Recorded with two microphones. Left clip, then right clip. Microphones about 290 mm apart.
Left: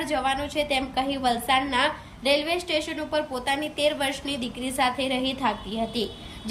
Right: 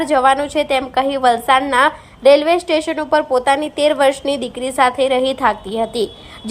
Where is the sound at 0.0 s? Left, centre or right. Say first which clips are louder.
Right 12 dB; centre.